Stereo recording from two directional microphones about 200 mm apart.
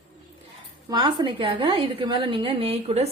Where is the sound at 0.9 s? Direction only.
20° right (ahead or behind).